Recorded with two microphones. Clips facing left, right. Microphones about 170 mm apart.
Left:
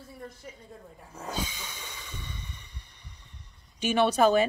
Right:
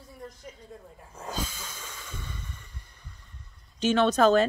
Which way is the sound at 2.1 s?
75° left (ahead or behind).